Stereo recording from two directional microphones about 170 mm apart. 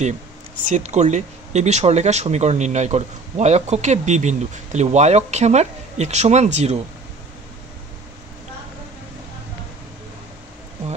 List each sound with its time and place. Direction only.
0.7 s speech: 40° right (ahead or behind)